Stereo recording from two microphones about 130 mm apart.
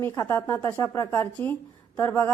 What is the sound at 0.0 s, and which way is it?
A woman's voice, 20° left (ahead or behind).